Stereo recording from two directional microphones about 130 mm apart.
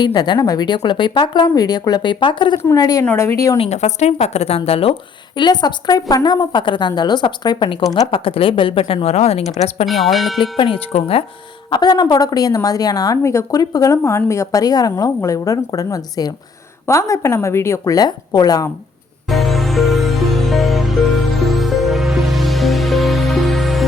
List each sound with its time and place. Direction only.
0.0 s speech: 35° left (ahead or behind)
3.6 s speech: 60° left (ahead or behind)
5.4 s speech: 35° left (ahead or behind); by 9.8 s 55° left (ahead or behind)
9.8 s speech: centre (ahead or behind)
10.6 s speech: 45° left (ahead or behind)
11.7 s speech: 30° left (ahead or behind)
19.3 s music: centre (ahead or behind)